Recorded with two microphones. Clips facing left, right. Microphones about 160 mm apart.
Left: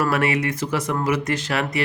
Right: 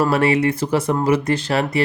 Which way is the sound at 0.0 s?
30° right (ahead or behind).